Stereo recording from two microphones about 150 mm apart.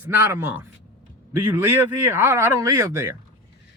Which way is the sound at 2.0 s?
15° right (ahead or behind).